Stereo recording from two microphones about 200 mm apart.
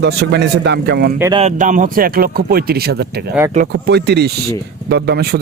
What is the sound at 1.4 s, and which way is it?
A man's voice, 35° right (ahead or behind).